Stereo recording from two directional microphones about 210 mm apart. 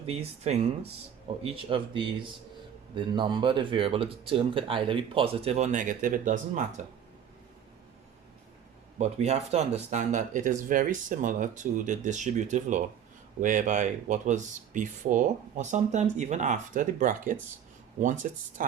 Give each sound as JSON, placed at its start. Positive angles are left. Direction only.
{"t": 0.0, "sound": "speech", "side_deg": -30}
{"t": 9.0, "sound": "speech", "side_deg": -30}